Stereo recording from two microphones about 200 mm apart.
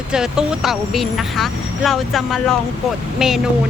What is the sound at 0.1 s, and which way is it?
Speech, 5° right (ahead or behind).